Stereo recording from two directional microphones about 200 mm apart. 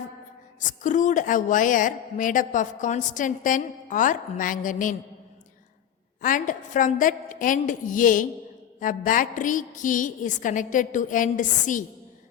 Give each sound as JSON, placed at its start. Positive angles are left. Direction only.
{"t": 0.6, "sound": "a woman's voice", "side_deg": 40}
{"t": 6.2, "sound": "a woman's voice", "side_deg": 40}